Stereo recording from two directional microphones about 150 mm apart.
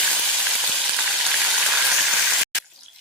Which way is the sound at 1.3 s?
5° right (ahead or behind).